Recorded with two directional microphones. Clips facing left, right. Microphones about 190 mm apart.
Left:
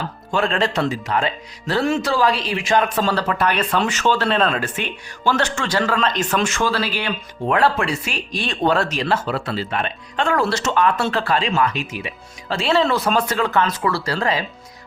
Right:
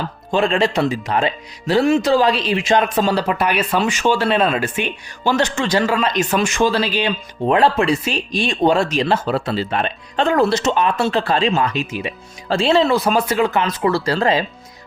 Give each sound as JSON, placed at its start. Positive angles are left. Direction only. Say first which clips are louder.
{"t": 0.3, "sound": "speech", "louder": "right 3 dB", "side_deg": -20}
{"t": 12.7, "sound": "speech", "louder": "right 2 dB", "side_deg": -10}